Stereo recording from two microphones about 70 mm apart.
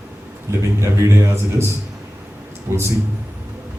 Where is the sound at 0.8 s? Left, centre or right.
Right.